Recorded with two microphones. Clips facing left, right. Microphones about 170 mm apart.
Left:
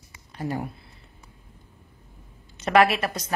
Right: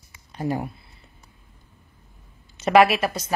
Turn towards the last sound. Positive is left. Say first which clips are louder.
# right 2 dB
turn(degrees=-5)  # may be behind; listen again after turning